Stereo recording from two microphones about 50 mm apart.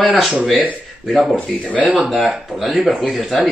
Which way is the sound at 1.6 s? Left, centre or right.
Left.